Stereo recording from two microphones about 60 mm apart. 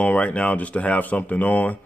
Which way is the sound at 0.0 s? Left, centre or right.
Left.